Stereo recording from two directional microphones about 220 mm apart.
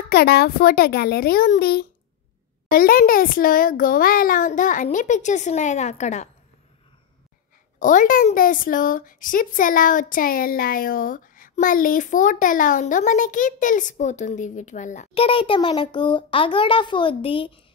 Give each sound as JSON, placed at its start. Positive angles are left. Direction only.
{"t": 0.1, "sound": "a child's voice", "side_deg": 45}
{"t": 7.8, "sound": "a woman's voice", "side_deg": 35}